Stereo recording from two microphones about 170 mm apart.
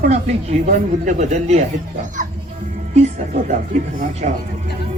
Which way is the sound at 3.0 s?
45° right (ahead or behind).